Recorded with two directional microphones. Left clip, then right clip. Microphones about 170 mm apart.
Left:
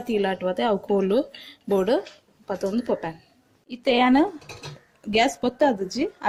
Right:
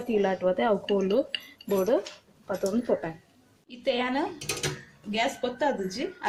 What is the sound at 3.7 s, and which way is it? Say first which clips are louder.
Speech: left 8 dB; 50° left (ahead or behind).